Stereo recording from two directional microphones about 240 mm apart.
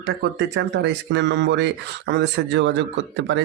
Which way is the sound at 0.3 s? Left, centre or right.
Right.